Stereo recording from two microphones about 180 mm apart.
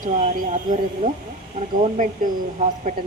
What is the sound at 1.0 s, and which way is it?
Speech, 50° right (ahead or behind).